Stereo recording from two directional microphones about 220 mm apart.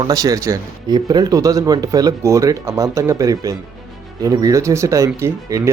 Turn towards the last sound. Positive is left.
turn(degrees=-15)  # may be behind; listen again after turning